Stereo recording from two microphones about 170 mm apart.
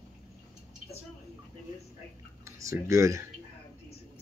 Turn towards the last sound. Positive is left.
turn(degrees=-20)  # may be behind; listen again after turning